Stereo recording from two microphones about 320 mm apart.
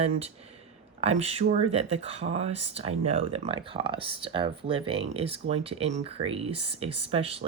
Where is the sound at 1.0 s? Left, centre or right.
Centre.